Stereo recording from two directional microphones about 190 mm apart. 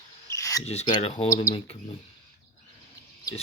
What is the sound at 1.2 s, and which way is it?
Speech, 15° left (ahead or behind).